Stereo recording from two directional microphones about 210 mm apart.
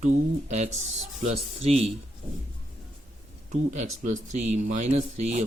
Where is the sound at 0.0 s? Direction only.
35° right (ahead or behind).